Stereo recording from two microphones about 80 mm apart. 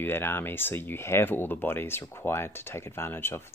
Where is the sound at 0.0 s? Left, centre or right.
Left.